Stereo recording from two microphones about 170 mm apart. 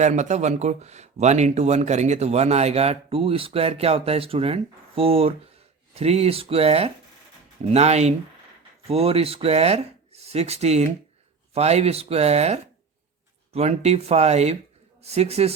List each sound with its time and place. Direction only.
0.0 s speech: 45° right (ahead or behind)